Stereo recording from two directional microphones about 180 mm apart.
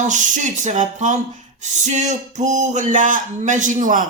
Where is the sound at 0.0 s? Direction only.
45° right (ahead or behind).